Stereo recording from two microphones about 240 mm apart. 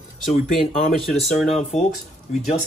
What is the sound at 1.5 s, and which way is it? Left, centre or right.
Speech, left.